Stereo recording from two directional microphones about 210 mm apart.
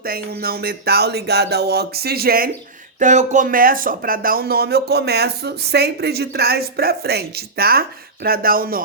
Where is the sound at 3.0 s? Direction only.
35° right (ahead or behind).